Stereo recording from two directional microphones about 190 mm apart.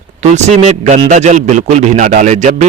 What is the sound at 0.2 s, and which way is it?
A man's voice, 40° right (ahead or behind).